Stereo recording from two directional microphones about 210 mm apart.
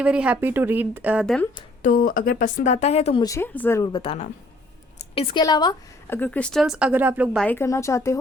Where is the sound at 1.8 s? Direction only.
40° left (ahead or behind).